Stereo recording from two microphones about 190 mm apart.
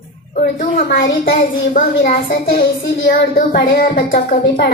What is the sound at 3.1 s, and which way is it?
A woman's voice, 50° left (ahead or behind).